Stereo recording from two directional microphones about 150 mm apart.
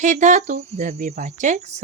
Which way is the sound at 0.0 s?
55° right (ahead or behind).